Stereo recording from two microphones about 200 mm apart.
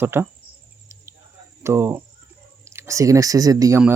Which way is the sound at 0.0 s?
10° right (ahead or behind).